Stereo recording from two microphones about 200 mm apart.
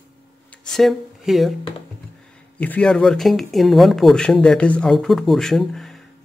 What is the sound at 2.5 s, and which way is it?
Speech, 5° left (ahead or behind).